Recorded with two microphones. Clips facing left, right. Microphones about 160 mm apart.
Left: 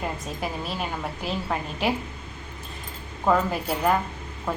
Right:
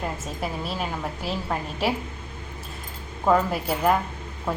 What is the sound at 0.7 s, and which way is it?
A woman's voice, centre (ahead or behind).